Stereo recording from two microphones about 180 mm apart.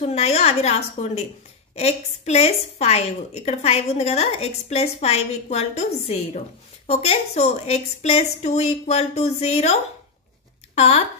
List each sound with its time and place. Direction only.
0.0 s a woman's voice: 35° left (ahead or behind)